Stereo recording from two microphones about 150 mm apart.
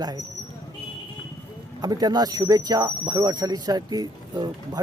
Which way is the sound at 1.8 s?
25° right (ahead or behind).